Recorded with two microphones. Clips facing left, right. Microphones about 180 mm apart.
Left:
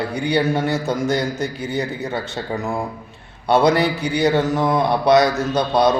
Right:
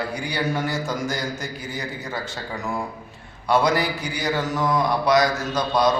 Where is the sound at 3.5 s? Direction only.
25° left (ahead or behind).